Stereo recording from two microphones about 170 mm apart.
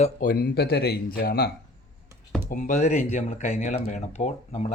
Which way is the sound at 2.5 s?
50° left (ahead or behind).